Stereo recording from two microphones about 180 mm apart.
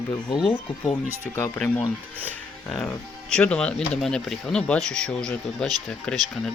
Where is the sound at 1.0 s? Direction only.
10° right (ahead or behind).